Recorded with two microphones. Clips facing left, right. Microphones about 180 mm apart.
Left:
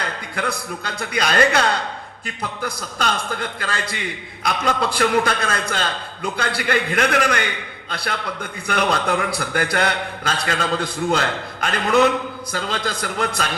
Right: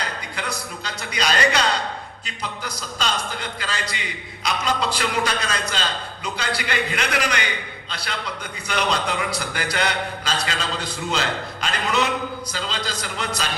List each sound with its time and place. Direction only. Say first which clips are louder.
0.3 s a man's voice: left 7 dB; 55° left (ahead or behind)